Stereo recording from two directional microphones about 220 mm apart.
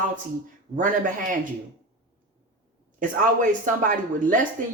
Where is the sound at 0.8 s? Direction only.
35° right (ahead or behind).